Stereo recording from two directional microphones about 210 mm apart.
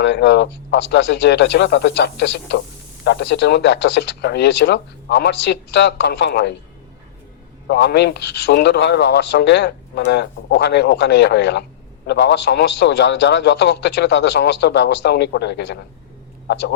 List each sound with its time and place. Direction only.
0.0 s speech: 55° left (ahead or behind)
7.7 s speech: 50° left (ahead or behind)